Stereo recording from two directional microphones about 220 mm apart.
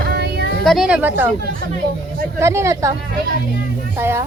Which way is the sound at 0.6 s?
Centre (ahead or behind).